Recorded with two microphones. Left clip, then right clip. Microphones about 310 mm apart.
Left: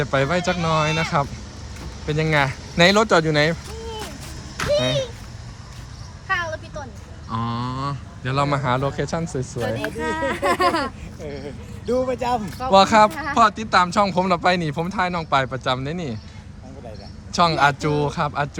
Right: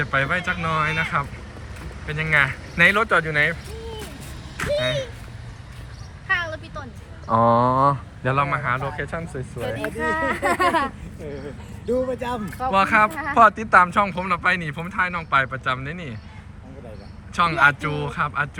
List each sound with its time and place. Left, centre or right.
0.0 s speech: centre
4.5 s a sound: centre
6.2 s a sound: left
7.3 s speech: centre
8.4 s speech: centre
10.3 s speech: centre
11.9 s speech: centre
13.1 s speech: centre
17.3 s speech: centre